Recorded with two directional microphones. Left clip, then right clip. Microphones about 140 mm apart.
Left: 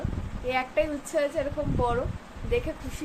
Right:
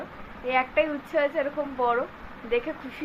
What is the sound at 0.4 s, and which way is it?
A woman's voice, 10° left (ahead or behind).